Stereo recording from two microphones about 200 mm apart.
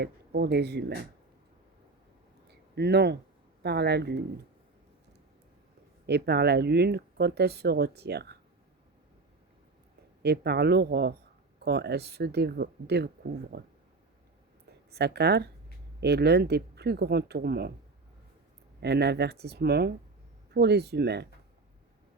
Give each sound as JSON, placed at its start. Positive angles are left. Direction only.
{"t": 0.0, "sound": "speech", "side_deg": -55}
{"t": 2.5, "sound": "a sound", "side_deg": -55}
{"t": 3.6, "sound": "speech", "side_deg": -55}
{"t": 6.1, "sound": "speech", "side_deg": -55}
{"t": 10.2, "sound": "speech", "side_deg": -55}
{"t": 14.8, "sound": "speech", "side_deg": -55}
{"t": 18.8, "sound": "speech", "side_deg": -55}